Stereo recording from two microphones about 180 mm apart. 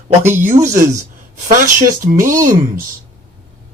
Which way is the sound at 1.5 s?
50° right (ahead or behind).